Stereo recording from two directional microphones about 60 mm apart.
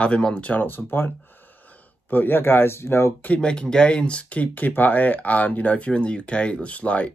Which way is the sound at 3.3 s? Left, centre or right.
Centre.